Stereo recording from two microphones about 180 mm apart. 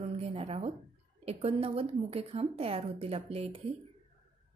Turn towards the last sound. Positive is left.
turn(degrees=-35)  # may be behind; listen again after turning